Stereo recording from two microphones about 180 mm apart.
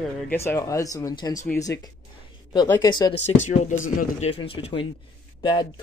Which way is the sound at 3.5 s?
40° left (ahead or behind).